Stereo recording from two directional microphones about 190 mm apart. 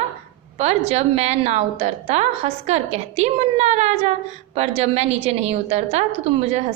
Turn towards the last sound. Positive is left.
turn(degrees=-35)  # may be behind; listen again after turning